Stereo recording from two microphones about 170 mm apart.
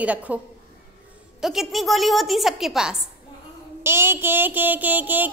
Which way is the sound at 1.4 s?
Centre (ahead or behind).